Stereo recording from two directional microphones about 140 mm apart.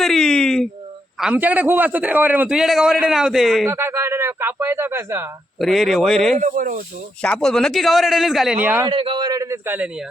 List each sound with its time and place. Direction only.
0.0 s a man's voice: 5° left (ahead or behind)
1.2 s a man's voice: 10° right (ahead or behind)
3.7 s speech: 15° right (ahead or behind)
5.5 s a man's voice: centre (ahead or behind)
6.4 s speech: 70° right (ahead or behind)
7.2 s a man's voice: 5° left (ahead or behind)
8.6 s speech: 15° right (ahead or behind)
8.9 s a man's voice: 40° right (ahead or behind); by 9.9 s 15° right (ahead or behind)